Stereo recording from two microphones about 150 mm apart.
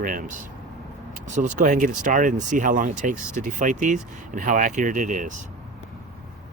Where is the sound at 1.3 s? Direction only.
55° right (ahead or behind).